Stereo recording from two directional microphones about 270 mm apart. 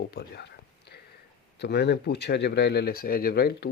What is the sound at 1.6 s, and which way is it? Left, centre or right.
Speech, left.